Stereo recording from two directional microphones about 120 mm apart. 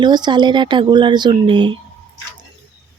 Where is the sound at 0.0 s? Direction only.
40° right (ahead or behind).